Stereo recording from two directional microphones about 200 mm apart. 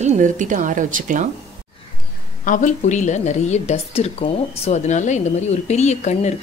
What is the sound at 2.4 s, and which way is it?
A woman's voice, 40° left (ahead or behind).